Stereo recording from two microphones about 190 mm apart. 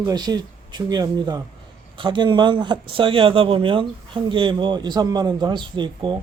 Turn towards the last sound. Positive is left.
turn(degrees=-25)  # may be behind; listen again after turning